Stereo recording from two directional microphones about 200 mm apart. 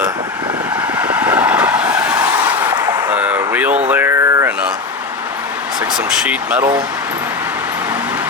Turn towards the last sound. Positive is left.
turn(degrees=-5)  # may be behind; listen again after turning